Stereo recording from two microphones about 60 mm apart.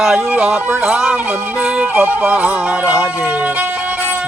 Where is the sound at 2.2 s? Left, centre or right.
Right.